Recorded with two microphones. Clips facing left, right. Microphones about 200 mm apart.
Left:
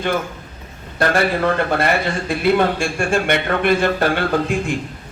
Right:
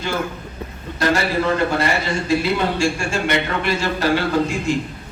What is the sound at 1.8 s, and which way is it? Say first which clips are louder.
A man's voice: left 2 dB; 55° left (ahead or behind).